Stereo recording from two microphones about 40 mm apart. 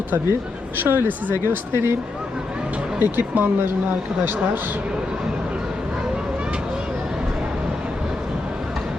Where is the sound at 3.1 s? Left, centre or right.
Right.